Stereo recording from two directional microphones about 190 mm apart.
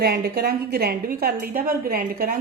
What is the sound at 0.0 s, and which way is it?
A woman's voice, 55° right (ahead or behind).